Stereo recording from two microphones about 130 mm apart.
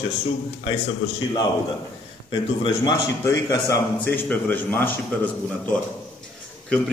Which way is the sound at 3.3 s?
25° left (ahead or behind).